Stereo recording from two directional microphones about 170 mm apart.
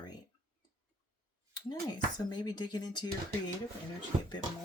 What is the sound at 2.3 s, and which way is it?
Speech, 25° left (ahead or behind).